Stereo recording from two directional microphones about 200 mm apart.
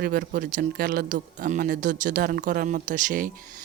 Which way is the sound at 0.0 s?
45° right (ahead or behind).